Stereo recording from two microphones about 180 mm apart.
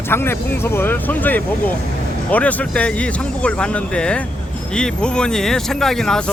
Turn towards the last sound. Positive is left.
turn(degrees=5)  # may be behind; listen again after turning